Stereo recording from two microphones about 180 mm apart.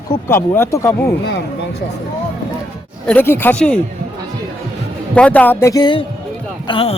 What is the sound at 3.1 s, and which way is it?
Speech, 10° left (ahead or behind).